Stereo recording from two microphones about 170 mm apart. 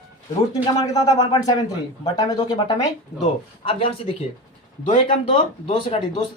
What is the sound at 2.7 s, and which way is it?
Speech, 40° left (ahead or behind).